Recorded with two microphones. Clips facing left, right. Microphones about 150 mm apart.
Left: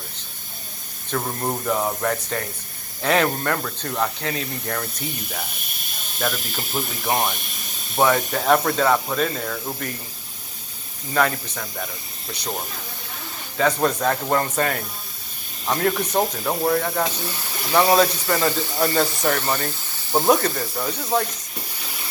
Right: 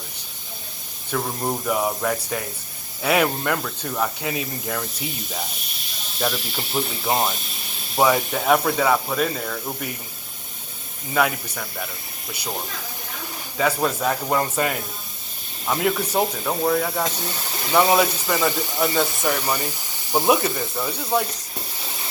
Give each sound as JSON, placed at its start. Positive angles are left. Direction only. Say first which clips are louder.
{"t": 1.1, "sound": "speech", "louder": "even", "side_deg": 0}
{"t": 5.5, "sound": "speech", "louder": "even", "side_deg": 50}
{"t": 7.0, "sound": "speech", "louder": "even", "side_deg": -20}
{"t": 7.9, "sound": "speech", "louder": "even", "side_deg": -10}
{"t": 11.1, "sound": "speech", "louder": "even", "side_deg": -10}
{"t": 13.6, "sound": "speech", "louder": "left 2 dB", "side_deg": -5}
{"t": 16.4, "sound": "speech", "louder": "even", "side_deg": 5}